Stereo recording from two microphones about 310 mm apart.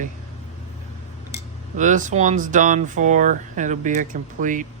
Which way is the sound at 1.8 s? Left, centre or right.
Right.